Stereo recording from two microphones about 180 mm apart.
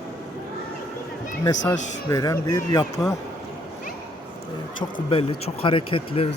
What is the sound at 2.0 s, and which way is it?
Speech, 20° left (ahead or behind).